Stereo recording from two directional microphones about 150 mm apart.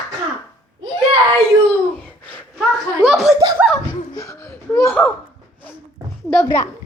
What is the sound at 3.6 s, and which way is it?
Speech, 10° right (ahead or behind).